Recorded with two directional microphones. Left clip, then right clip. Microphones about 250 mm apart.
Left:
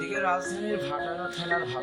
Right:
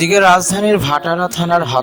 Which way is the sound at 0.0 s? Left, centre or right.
Right.